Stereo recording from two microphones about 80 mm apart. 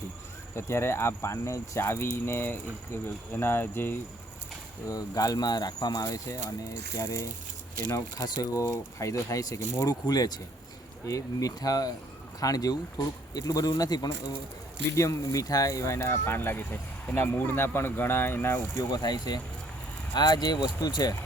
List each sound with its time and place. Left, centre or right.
0.5 s speech: left
4.9 s speech: left
7.9 s speech: left
11.0 s speech: left
14.8 s speech: left
18.7 s speech: left